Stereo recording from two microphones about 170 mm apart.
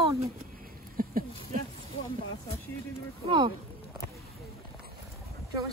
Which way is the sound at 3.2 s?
30° right (ahead or behind).